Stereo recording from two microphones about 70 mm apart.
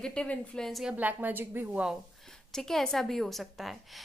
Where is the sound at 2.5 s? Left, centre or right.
Centre.